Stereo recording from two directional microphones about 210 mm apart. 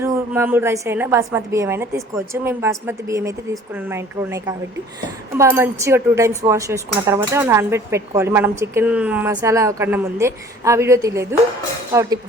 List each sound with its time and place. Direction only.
0.0 s speech: 10° right (ahead or behind)